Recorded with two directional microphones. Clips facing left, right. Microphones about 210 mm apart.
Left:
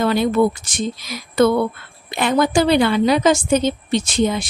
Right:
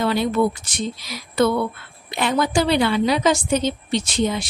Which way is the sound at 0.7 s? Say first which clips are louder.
Left 3 dB; 45° left (ahead or behind).